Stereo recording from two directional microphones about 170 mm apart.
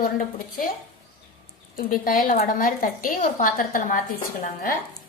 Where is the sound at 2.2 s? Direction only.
55° left (ahead or behind).